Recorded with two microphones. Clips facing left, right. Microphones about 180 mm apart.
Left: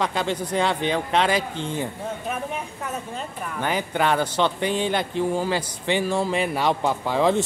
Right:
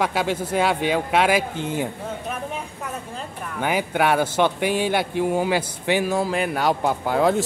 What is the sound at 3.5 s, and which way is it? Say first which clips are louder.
A man's voice: right 2 dB; 10° right (ahead or behind).